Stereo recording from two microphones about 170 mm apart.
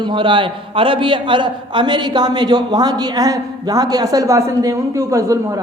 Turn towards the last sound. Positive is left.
turn(degrees=-20)  # may be behind; listen again after turning